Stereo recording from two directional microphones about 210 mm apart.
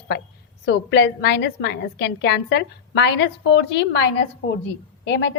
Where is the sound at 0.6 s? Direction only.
55° left (ahead or behind).